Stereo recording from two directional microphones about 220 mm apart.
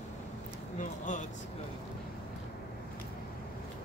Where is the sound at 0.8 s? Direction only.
35° left (ahead or behind).